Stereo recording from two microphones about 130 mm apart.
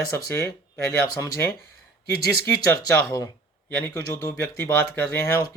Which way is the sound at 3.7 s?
20° left (ahead or behind).